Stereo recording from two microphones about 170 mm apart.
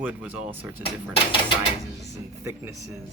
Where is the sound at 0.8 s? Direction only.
30° left (ahead or behind).